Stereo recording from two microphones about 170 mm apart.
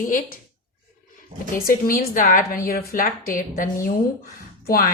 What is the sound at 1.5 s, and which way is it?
A woman's voice, 60° left (ahead or behind).